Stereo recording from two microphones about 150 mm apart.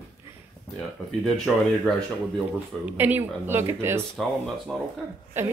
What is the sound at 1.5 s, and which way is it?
Speech, centre (ahead or behind).